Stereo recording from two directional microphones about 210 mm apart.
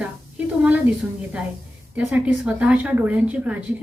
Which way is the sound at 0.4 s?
5° right (ahead or behind).